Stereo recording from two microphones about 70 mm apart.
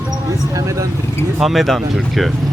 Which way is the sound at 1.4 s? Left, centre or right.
Centre.